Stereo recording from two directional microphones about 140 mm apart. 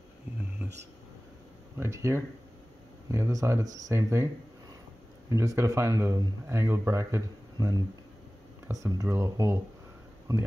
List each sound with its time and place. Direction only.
1.8 s speech: 20° right (ahead or behind)
5.3 s speech: 25° right (ahead or behind)